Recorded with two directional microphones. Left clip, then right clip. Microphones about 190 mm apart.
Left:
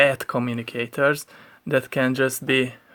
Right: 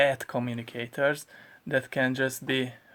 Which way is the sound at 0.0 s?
30° left (ahead or behind).